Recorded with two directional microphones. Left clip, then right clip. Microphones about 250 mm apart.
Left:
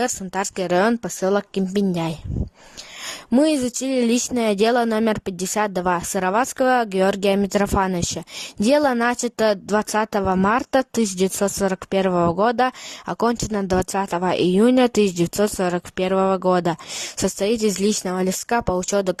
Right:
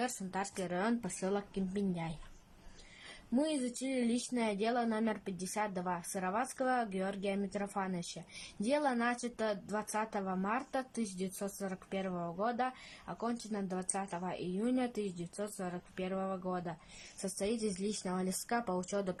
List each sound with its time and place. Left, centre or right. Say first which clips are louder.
0.0 s a woman's voice: left 15 dB; left
3.3 s a woman's voice: left 17 dB; left
17.2 s speech: left 16 dB; left